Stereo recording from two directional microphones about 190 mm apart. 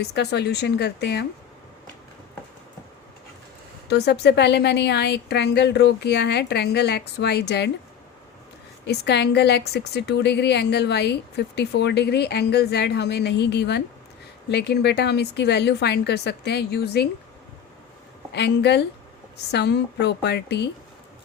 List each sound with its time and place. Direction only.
0.0 s a woman's voice: 60° left (ahead or behind)
3.8 s a woman's voice: 60° left (ahead or behind)
8.9 s a woman's voice: 60° left (ahead or behind)
18.3 s a woman's voice: 60° left (ahead or behind)